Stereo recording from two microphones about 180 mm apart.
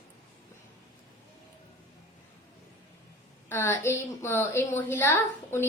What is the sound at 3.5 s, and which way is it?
A woman's voice, 10° left (ahead or behind).